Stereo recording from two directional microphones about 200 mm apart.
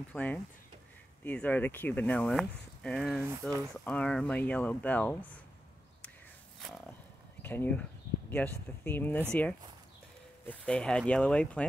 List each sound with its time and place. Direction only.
0.1 s speech: 5° left (ahead or behind)
3.3 s speech: 20° right (ahead or behind)
3.7 s speech: 5° left (ahead or behind)
7.4 s speech: 10° left (ahead or behind)